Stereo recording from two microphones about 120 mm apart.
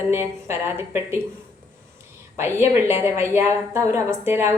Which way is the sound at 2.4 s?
20° right (ahead or behind).